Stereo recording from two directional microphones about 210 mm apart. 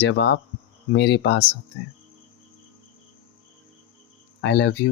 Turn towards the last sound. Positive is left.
turn(degrees=55)  # may be behind; listen again after turning